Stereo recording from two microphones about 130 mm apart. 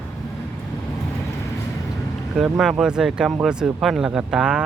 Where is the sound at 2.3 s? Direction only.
Centre (ahead or behind).